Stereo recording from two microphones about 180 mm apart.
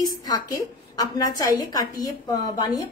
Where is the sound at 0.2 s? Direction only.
20° left (ahead or behind).